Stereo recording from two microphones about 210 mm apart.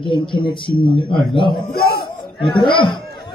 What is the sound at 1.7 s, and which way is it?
Speech, 45° left (ahead or behind).